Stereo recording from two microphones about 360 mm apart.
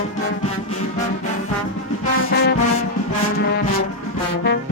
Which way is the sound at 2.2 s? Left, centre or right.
Left.